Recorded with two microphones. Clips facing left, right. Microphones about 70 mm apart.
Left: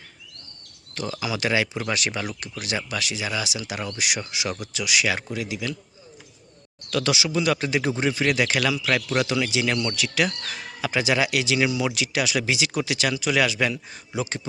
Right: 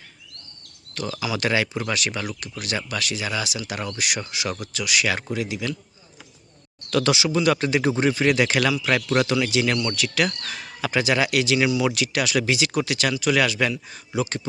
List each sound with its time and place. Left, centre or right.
0.9 s speech: centre
1.9 s speech: left
3.2 s speech: centre
3.9 s speech: centre
6.9 s speech: centre